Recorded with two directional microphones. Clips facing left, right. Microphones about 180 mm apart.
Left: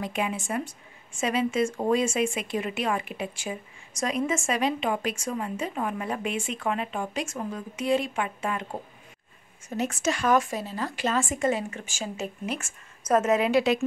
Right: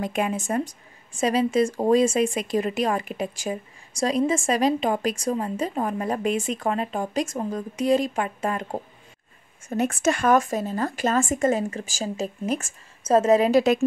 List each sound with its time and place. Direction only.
0.0 s speech: 45° right (ahead or behind)
9.7 s speech: 55° right (ahead or behind)